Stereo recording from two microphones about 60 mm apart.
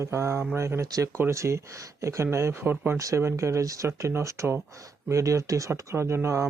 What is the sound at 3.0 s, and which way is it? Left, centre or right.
Speech, right.